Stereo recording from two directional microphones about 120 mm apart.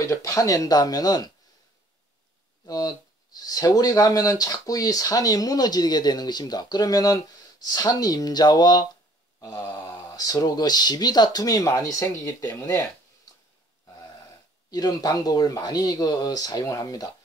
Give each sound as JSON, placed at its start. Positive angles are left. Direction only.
{"t": 0.0, "sound": "speech", "side_deg": 25}
{"t": 2.6, "sound": "speech", "side_deg": 30}
{"t": 14.7, "sound": "speech", "side_deg": 30}